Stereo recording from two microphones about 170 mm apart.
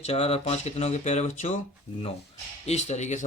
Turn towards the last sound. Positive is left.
turn(degrees=45)  # may be behind; listen again after turning